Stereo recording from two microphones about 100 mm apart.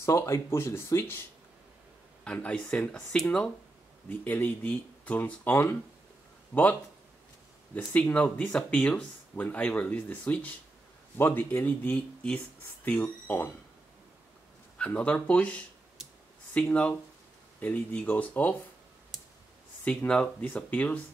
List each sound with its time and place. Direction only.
0.0 s speech: 30° left (ahead or behind)
2.2 s speech: 10° left (ahead or behind)
8.0 s speech: 15° left (ahead or behind)
14.8 s speech: 15° left (ahead or behind)
19.8 s speech: 10° left (ahead or behind)